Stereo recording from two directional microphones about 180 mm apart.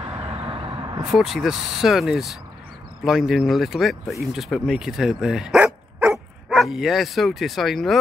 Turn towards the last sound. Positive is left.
turn(degrees=0)  # may be behind; listen again after turning